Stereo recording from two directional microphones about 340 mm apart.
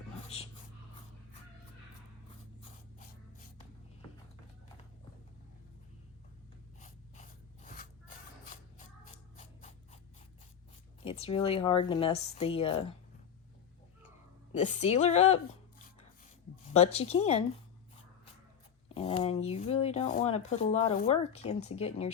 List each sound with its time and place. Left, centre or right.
6.7 s a sound: left
9.4 s scissors: left
11.0 s speech: centre
14.5 s a woman's voice: left
16.7 s speech: centre
18.9 s speech: centre